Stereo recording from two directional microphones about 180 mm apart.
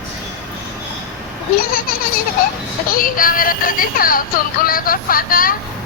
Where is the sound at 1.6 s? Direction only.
55° left (ahead or behind).